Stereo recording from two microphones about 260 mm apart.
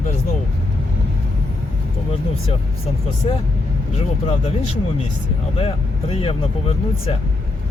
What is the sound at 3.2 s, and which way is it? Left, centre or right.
Speech, left.